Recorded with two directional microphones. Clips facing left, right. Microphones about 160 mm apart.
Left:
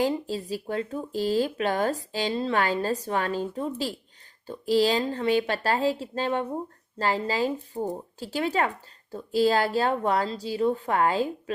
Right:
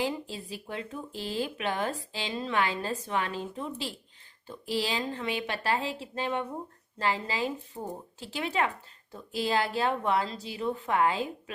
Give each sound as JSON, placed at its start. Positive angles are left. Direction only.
{"t": 0.0, "sound": "speech", "side_deg": 40}
{"t": 7.7, "sound": "speech", "side_deg": 25}
{"t": 8.2, "sound": "speech", "side_deg": 40}